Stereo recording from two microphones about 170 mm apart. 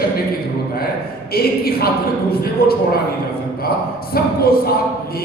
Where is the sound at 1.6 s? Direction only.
65° left (ahead or behind).